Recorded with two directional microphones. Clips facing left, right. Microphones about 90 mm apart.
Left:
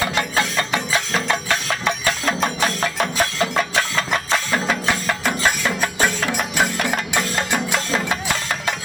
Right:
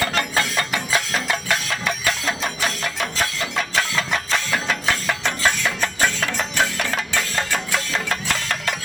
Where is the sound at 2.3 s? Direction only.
40° left (ahead or behind).